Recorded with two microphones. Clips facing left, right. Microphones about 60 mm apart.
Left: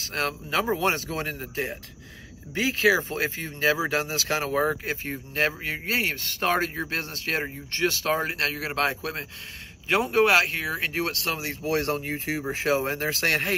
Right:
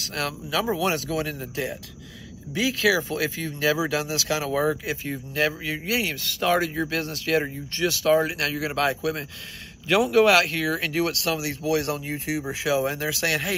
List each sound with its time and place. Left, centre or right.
0.0 s speech: left